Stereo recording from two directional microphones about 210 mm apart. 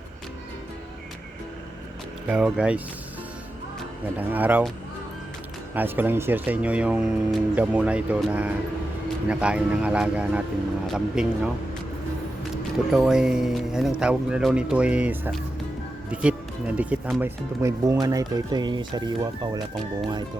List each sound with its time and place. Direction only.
2.2 s speech: 5° right (ahead or behind)
4.2 s speech: 10° right (ahead or behind)
5.7 s speech: 10° right (ahead or behind)
12.9 s speech: centre (ahead or behind)
16.7 s speech: 5° right (ahead or behind)